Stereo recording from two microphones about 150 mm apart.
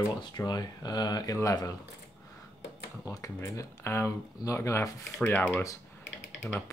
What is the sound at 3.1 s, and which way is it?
Speech, 20° left (ahead or behind).